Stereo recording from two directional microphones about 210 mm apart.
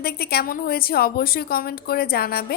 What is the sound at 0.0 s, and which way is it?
A woman's voice, 45° left (ahead or behind).